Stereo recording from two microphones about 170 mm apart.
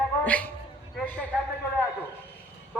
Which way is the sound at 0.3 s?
10° left (ahead or behind).